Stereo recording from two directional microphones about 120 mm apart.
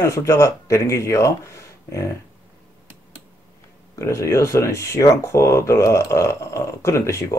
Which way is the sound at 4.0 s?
25° left (ahead or behind).